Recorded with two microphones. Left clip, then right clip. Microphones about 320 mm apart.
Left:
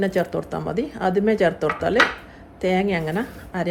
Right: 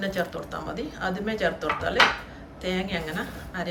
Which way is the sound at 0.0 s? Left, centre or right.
Centre.